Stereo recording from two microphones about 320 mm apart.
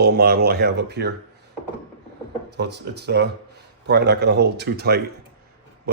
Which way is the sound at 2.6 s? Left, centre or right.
Right.